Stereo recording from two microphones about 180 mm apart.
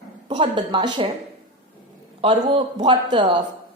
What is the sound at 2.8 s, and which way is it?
Speech, 25° right (ahead or behind).